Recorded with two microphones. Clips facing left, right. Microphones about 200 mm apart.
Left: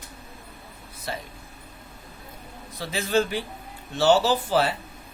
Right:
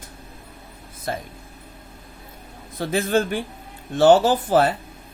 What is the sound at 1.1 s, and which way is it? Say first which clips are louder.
Speech: right 5 dB; 50° right (ahead or behind).